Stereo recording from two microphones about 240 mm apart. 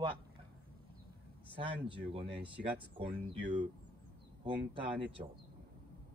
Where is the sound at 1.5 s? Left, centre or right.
Right.